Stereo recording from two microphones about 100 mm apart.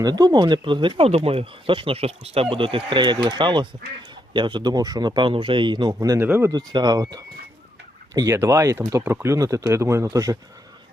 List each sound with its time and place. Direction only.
0.0 s a man's voice: 40° right (ahead or behind)
5.9 s speech: 35° right (ahead or behind)
6.1 s speech: 20° right (ahead or behind)
6.5 s speech: 40° right (ahead or behind)